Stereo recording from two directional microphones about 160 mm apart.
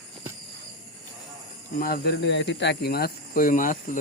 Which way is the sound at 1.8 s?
80° left.